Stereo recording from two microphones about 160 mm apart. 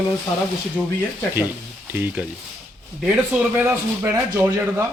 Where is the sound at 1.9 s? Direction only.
10° right (ahead or behind).